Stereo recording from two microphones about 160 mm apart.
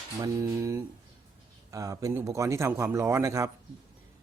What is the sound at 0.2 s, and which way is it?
Speech, 20° right (ahead or behind).